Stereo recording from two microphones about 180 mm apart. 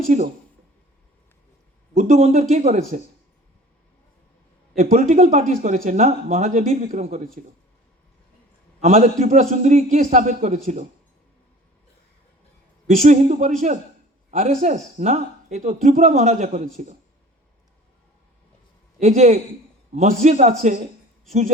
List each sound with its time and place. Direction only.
0.1 s speech: 45° right (ahead or behind)
2.0 s speech: 40° right (ahead or behind)
4.8 s speech: 40° right (ahead or behind)
8.8 s speech: 40° right (ahead or behind)
13.0 s a man's voice: 40° right (ahead or behind)
19.0 s a man's voice: 40° right (ahead or behind)